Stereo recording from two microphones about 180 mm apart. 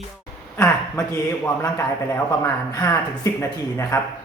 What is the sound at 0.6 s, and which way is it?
A man's voice, 15° left (ahead or behind).